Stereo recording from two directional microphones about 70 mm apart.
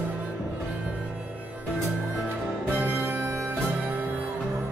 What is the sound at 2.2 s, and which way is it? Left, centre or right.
Music, right.